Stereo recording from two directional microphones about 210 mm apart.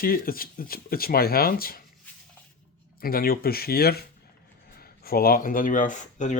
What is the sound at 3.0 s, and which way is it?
Speech, 45° left (ahead or behind).